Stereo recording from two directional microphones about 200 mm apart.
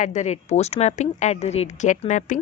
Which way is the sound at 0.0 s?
35° left (ahead or behind).